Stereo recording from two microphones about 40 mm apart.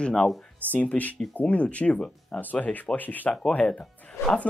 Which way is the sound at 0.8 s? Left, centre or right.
Left.